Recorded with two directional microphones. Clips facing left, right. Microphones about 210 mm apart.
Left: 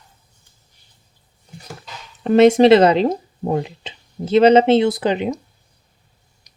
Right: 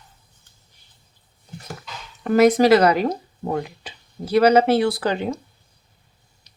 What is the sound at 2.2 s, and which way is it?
Speech, 25° left (ahead or behind).